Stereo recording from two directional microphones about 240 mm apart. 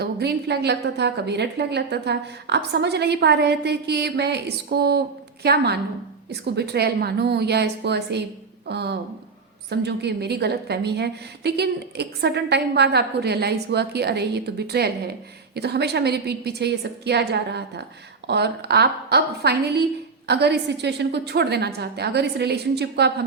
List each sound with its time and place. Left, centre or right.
0.0 s a woman's voice: right